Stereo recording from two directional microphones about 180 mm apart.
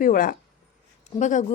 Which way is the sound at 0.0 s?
50° left (ahead or behind).